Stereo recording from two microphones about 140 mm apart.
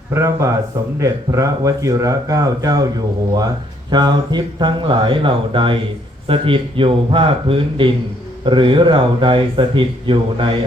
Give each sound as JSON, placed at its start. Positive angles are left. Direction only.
{"t": 0.1, "sound": "speech", "side_deg": -20}
{"t": 3.9, "sound": "speech", "side_deg": -30}